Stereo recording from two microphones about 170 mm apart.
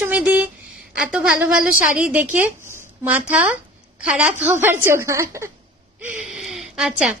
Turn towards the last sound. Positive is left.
turn(degrees=0)  # may be behind; listen again after turning